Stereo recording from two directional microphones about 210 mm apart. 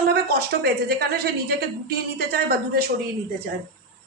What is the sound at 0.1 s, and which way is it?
A woman's voice, 50° right (ahead or behind).